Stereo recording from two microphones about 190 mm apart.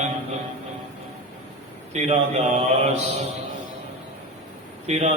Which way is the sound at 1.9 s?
35° right (ahead or behind).